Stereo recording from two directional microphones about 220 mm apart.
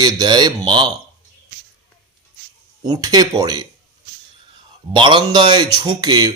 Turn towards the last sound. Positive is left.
turn(degrees=-20)  # may be behind; listen again after turning